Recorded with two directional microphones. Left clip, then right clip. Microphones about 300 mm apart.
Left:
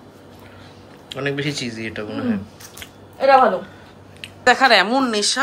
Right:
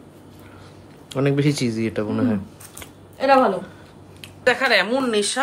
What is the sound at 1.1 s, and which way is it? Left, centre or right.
Speech, right.